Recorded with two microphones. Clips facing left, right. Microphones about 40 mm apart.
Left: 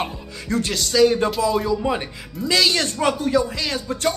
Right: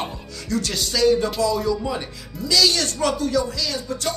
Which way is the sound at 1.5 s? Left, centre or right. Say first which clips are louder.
Left 2 dB; left.